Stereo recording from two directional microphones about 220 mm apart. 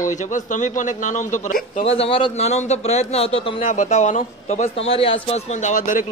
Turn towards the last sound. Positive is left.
turn(degrees=35)  # may be behind; listen again after turning